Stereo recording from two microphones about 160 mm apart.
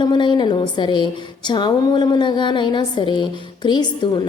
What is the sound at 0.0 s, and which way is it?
A woman's voice, 30° left (ahead or behind).